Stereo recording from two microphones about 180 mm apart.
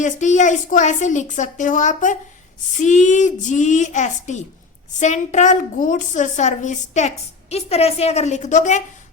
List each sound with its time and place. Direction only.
0.0 s a woman's voice: 40° left (ahead or behind)